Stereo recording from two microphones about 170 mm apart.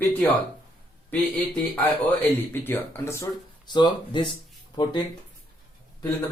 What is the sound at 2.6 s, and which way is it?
Speech, 15° left (ahead or behind).